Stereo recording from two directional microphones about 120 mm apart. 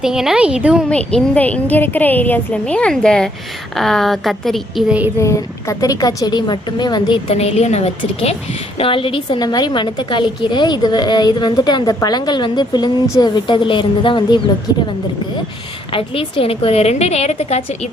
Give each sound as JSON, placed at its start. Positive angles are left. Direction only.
{"t": 0.0, "sound": "a woman's voice", "side_deg": -5}
{"t": 0.9, "sound": "a woman's voice", "side_deg": 10}
{"t": 4.9, "sound": "a woman's voice", "side_deg": -10}
{"t": 5.2, "sound": "a woman's voice", "side_deg": 25}
{"t": 7.3, "sound": "a woman's voice", "side_deg": 60}
{"t": 8.8, "sound": "a woman's voice", "side_deg": 45}